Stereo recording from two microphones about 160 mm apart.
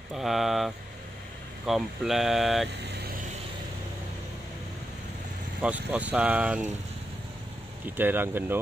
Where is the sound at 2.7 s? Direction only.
90° right.